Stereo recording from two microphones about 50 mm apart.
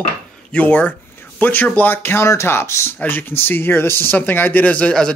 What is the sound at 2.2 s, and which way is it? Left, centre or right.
Speech, left.